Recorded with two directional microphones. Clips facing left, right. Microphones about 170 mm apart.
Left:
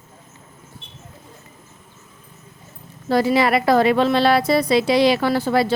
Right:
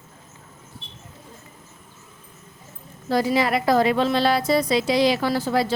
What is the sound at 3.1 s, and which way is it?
A woman's voice, 70° left (ahead or behind).